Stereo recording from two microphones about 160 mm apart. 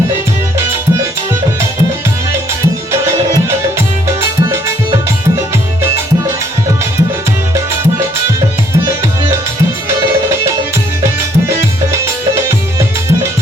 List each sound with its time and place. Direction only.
2.9 s music: 15° right (ahead or behind)
11.0 s music: 15° right (ahead or behind)